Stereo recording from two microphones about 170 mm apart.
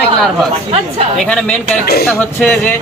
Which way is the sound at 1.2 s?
5° left (ahead or behind).